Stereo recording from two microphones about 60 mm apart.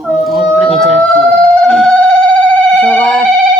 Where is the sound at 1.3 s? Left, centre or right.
Centre.